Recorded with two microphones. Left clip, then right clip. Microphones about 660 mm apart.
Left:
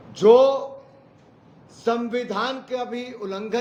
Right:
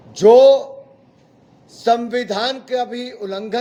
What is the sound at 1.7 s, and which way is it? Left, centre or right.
A man's voice, right.